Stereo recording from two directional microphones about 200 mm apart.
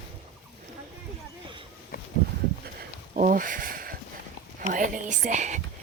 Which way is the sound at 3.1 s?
40° right (ahead or behind).